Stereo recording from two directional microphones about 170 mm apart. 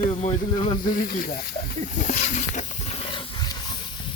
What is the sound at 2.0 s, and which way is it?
Speech, 45° left (ahead or behind).